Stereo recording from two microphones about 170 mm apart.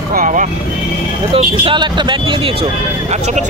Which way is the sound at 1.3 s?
30° right (ahead or behind).